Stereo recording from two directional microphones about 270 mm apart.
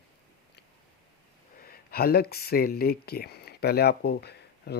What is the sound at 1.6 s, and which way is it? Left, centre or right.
Speech, left.